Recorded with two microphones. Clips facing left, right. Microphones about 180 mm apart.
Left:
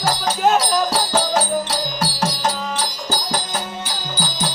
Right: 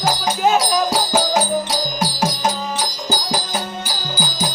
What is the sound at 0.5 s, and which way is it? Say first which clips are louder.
Music: right 1 dB; 10° right (ahead or behind).